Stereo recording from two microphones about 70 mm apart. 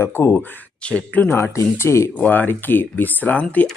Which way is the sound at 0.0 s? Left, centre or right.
Left.